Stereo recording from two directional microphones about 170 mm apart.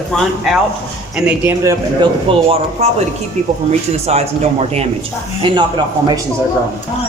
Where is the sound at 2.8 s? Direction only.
40° right (ahead or behind).